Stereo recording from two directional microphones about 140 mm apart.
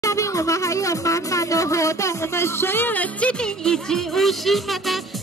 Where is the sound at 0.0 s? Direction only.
20° left (ahead or behind).